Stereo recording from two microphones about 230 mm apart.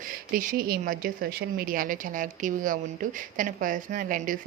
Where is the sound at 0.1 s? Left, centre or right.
Right.